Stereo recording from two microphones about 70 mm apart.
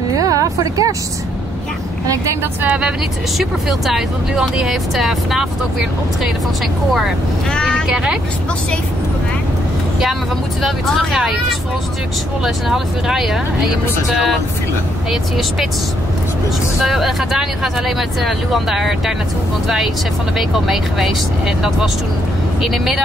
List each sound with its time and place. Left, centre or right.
0.2 s a sound: right
3.3 s speech: centre
7.5 s a sound: centre
7.8 s speech: centre
10.6 s speech: centre
15.0 s speech: centre
16.8 s speech: centre
20.3 s speech: centre